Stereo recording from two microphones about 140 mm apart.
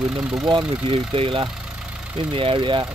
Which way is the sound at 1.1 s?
35° right (ahead or behind).